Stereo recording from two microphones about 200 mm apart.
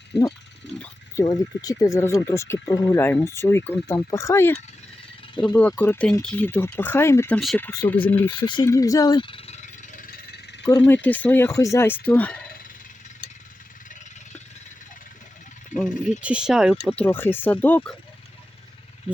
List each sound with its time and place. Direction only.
0.8 s speech: 15° left (ahead or behind)
5.5 s speech: 5° left (ahead or behind)
8.4 s speech: 25° left (ahead or behind)
8.6 s a sound: 15° left (ahead or behind); by 10.4 s 40° left (ahead or behind)
10.7 s speech: 15° left (ahead or behind)
15.7 s speech: 5° right (ahead or behind)
16.9 s speech: 10° left (ahead or behind)